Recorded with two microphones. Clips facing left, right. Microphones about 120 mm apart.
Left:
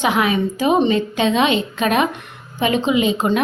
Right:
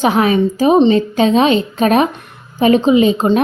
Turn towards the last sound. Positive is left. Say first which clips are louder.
# right 6 dB
turn(degrees=-35)  # may be behind; listen again after turning